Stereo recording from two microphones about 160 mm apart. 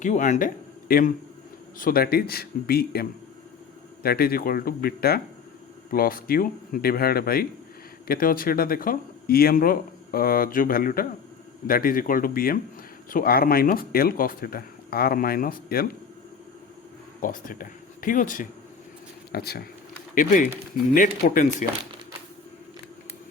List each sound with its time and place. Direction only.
0.0 s speech: 50° left (ahead or behind); by 15.9 s 65° left (ahead or behind)
17.2 s speech: 60° left (ahead or behind)
19.3 s speech: 80° left
20.1 s speech: 55° left (ahead or behind)